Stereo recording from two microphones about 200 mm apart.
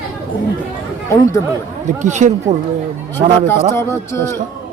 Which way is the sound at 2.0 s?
35° right (ahead or behind).